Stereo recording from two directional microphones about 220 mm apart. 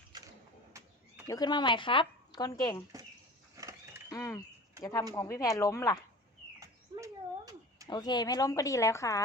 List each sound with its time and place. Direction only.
0.1 s a sound: 20° right (ahead or behind)
1.3 s speech: 20° left (ahead or behind)
3.5 s a sound: 15° right (ahead or behind)
4.1 s a woman's voice: 15° left (ahead or behind)
6.6 s bird: 15° right (ahead or behind)
7.9 s a woman's voice: 20° left (ahead or behind)